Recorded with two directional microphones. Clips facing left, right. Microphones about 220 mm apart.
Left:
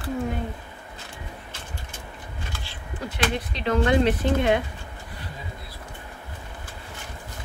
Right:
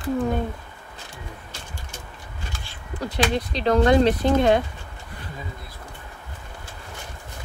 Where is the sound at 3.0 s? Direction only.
35° right (ahead or behind).